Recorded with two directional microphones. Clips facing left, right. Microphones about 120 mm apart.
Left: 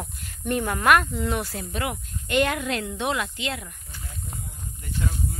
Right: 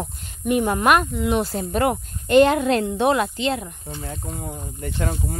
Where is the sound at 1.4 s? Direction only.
30° right (ahead or behind).